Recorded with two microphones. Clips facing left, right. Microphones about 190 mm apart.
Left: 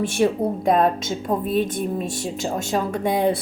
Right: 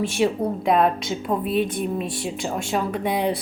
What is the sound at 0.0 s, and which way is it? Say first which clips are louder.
A woman's voice: left 2 dB; 50° left (ahead or behind).